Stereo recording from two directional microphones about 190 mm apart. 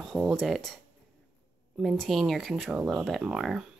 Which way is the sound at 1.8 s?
Centre (ahead or behind).